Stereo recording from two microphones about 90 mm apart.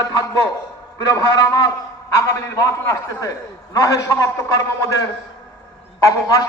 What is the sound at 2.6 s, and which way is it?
A man's voice, 40° left (ahead or behind).